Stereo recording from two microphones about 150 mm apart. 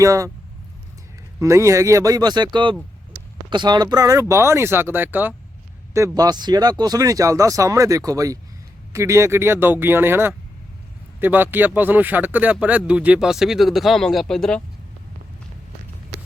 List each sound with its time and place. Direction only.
0.0 s speech: 20° right (ahead or behind)
1.4 s speech: 20° right (ahead or behind)
6.1 s speech: 30° right (ahead or behind); by 14.6 s 5° left (ahead or behind)